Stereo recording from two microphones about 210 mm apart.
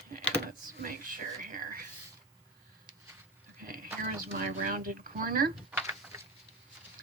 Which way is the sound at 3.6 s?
40° right (ahead or behind).